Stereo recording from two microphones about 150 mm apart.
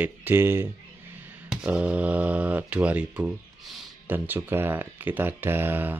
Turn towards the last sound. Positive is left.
turn(degrees=-15)  # may be behind; listen again after turning